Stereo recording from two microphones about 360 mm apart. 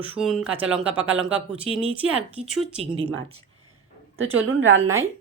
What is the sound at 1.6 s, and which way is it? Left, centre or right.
Speech, centre.